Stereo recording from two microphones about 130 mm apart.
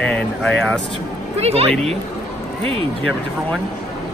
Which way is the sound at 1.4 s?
50° right (ahead or behind).